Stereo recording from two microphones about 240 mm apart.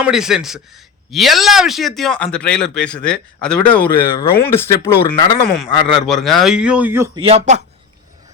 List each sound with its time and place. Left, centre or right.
0.0 s speech: centre
6.1 s speech: centre
7.2 s speech: right